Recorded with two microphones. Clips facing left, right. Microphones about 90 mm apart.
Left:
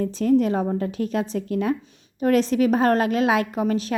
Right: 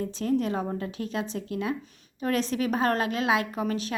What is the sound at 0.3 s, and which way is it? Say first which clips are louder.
A woman's voice: left 7 dB; 35° left (ahead or behind).